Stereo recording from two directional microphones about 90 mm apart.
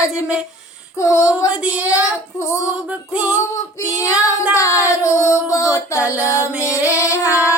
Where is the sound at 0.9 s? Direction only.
35° left (ahead or behind).